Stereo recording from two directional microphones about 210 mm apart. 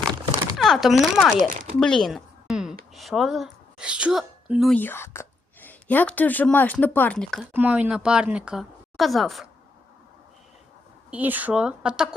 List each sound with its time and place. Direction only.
0.5 s speech: centre (ahead or behind)
1.4 s speech: 35° right (ahead or behind)
1.8 s a sound: 5° left (ahead or behind)
2.9 s speech: centre (ahead or behind)
4.7 s a woman's voice: 10° left (ahead or behind)
7.5 s speech: 5° right (ahead or behind)
11.1 s speech: 10° right (ahead or behind)